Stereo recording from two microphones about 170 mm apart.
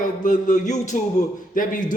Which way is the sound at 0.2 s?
50° left (ahead or behind).